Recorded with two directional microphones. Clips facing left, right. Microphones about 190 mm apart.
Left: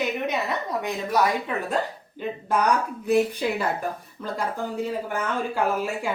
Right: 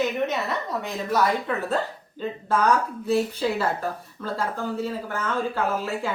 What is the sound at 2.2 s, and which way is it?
A woman's voice, 15° left (ahead or behind).